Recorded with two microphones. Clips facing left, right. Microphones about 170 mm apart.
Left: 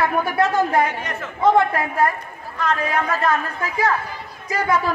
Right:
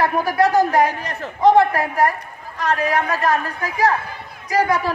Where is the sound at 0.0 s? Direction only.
35° right (ahead or behind).